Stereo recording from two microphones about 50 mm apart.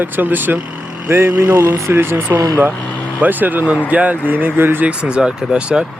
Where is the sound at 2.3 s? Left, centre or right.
Right.